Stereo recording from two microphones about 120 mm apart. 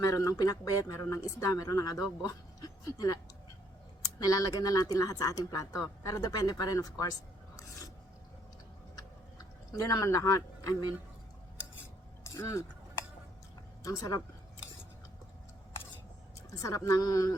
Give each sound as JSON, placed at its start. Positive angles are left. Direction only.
{"t": 0.0, "sound": "speech", "side_deg": 30}
{"t": 4.2, "sound": "speech", "side_deg": 30}
{"t": 9.4, "sound": "speech", "side_deg": 30}
{"t": 12.2, "sound": "speech", "side_deg": 25}
{"t": 13.8, "sound": "speech", "side_deg": 30}
{"t": 16.6, "sound": "speech", "side_deg": 30}